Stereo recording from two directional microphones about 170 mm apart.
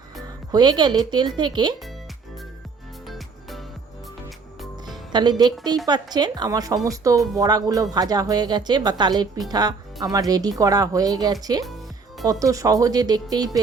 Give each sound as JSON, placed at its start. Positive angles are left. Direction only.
{"t": 0.2, "sound": "speech", "side_deg": -25}
{"t": 3.1, "sound": "music", "side_deg": 0}
{"t": 5.1, "sound": "speech", "side_deg": -25}